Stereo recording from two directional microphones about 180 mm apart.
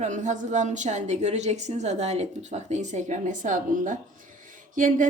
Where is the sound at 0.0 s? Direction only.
40° right (ahead or behind).